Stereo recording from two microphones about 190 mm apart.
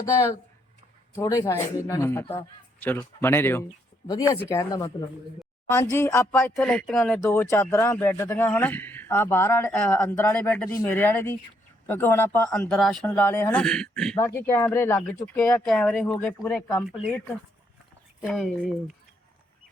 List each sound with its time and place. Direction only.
1.1 s a man's voice: 15° left (ahead or behind)
13.1 s a man's voice: 10° left (ahead or behind)
16.8 s speech: 5° right (ahead or behind)
18.2 s speech: centre (ahead or behind)